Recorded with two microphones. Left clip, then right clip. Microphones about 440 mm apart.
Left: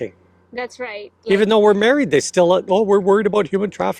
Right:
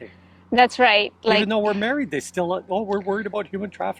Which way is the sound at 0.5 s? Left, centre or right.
Right.